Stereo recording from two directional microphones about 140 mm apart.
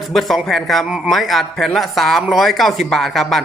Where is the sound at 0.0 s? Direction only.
Centre (ahead or behind).